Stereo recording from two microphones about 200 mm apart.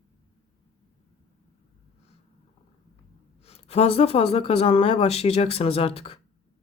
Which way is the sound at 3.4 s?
30° left (ahead or behind).